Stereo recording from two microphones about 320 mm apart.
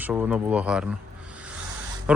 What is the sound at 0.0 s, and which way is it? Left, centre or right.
Speech, centre.